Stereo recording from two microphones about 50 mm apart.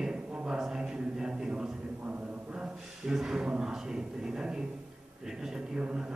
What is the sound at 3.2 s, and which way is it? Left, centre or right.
A man's voice, centre.